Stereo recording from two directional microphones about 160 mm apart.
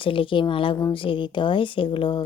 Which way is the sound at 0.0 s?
35° left (ahead or behind).